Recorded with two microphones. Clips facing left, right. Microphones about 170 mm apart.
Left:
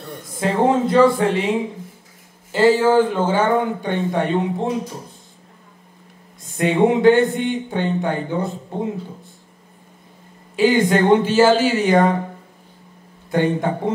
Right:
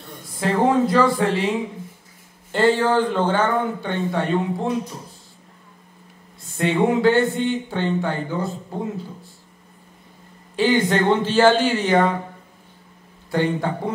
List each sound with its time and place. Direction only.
0.4 s speech: 25° left (ahead or behind)
2.5 s speech: 5° left (ahead or behind); by 4.7 s 20° left (ahead or behind)
6.5 s speech: 15° left (ahead or behind)
10.5 s speech: 10° left (ahead or behind)
13.3 s speech: 20° left (ahead or behind)